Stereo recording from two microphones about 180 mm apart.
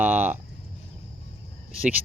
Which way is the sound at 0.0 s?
10° right (ahead or behind).